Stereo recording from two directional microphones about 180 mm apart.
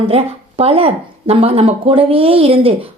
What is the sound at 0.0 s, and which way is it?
Speech, 35° right (ahead or behind).